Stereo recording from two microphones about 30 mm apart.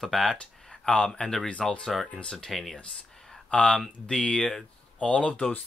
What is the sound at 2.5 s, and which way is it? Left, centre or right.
Speech, centre.